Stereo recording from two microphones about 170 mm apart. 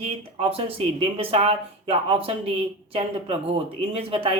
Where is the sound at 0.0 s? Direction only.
35° right (ahead or behind).